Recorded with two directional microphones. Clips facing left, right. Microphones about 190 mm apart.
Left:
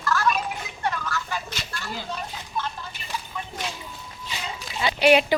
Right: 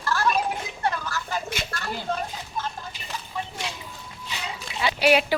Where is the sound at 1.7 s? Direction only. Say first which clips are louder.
Right 1 dB; 60° right (ahead or behind).